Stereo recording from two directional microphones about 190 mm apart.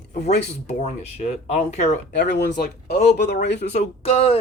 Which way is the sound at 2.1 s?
65° left (ahead or behind).